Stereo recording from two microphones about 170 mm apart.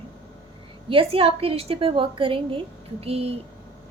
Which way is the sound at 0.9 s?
35° right (ahead or behind).